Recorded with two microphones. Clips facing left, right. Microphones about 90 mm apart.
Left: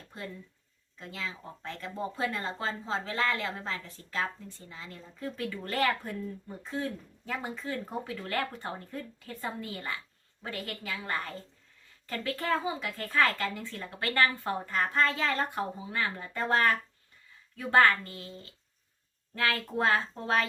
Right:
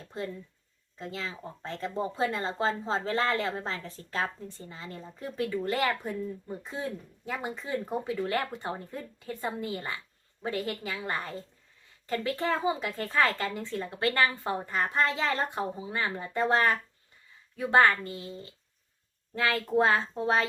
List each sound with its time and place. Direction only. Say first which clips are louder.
0.9 s speech: right 2 dB; 35° right (ahead or behind)
5.2 s speech: right 5 dB; 15° right (ahead or behind)
19.3 s speech: right 3 dB; 20° right (ahead or behind)